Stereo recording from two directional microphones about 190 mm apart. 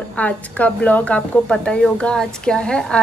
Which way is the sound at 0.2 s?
5° left (ahead or behind).